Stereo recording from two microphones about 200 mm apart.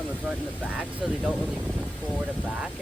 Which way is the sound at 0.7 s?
5° right (ahead or behind).